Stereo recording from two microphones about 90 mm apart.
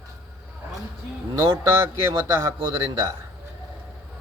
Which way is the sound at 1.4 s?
40° right (ahead or behind).